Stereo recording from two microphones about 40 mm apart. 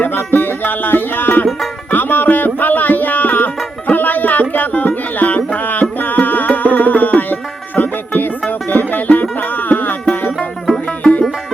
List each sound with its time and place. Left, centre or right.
0.0 s music: left
11.0 s music: left